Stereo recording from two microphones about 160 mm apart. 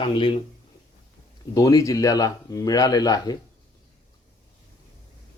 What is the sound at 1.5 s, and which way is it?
Speech, 20° left (ahead or behind).